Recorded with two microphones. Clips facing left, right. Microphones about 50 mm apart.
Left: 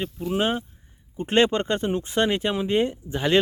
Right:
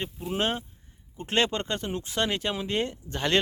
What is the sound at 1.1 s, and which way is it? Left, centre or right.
Speech, left.